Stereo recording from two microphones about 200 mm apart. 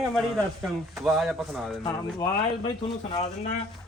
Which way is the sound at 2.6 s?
25° left (ahead or behind).